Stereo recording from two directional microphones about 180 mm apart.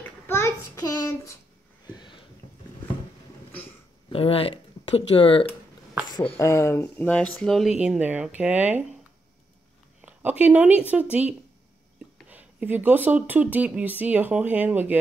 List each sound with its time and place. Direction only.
0.3 s child singing: 15° left (ahead or behind)
4.1 s speech: 30° left (ahead or behind)
6.2 s speech: 15° left (ahead or behind); by 8.8 s 10° right (ahead or behind)
10.0 s speech: 10° right (ahead or behind)